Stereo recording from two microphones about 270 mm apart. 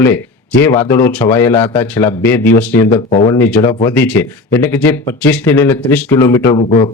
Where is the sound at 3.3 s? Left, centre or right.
Centre.